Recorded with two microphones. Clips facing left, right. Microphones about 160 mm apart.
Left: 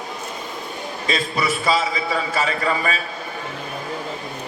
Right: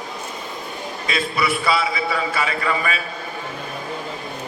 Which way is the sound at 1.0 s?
35° left (ahead or behind).